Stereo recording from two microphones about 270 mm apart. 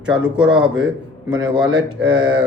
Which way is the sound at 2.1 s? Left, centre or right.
Centre.